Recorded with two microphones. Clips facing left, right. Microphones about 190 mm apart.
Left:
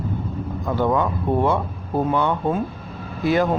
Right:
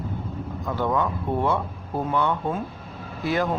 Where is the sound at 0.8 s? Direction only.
30° left (ahead or behind).